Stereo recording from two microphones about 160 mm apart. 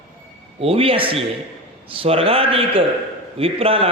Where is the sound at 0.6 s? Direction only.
35° right (ahead or behind).